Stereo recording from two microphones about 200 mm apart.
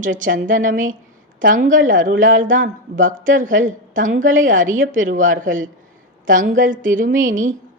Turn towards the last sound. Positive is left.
turn(degrees=-40)  # may be behind; listen again after turning